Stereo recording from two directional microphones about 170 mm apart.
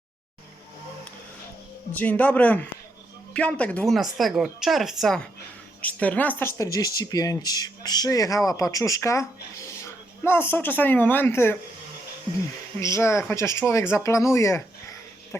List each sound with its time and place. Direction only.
1.9 s speech: 10° left (ahead or behind)
12.8 s speech: 15° left (ahead or behind)